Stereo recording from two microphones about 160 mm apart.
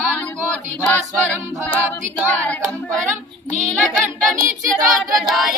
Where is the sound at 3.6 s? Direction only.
5° left (ahead or behind).